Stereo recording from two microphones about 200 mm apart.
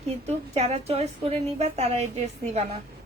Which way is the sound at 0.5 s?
30° right (ahead or behind).